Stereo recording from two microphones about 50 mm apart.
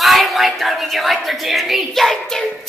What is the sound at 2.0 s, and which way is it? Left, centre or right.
Child singing, centre.